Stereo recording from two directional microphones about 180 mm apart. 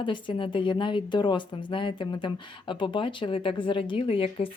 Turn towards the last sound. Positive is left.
turn(degrees=30)  # may be behind; listen again after turning